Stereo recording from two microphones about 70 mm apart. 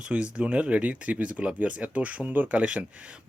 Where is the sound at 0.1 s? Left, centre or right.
Centre.